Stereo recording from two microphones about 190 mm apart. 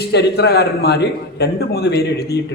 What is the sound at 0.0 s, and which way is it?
A man's voice, 60° left (ahead or behind).